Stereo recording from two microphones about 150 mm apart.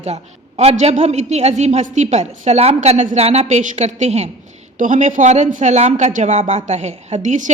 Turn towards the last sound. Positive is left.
turn(degrees=-55)  # may be behind; listen again after turning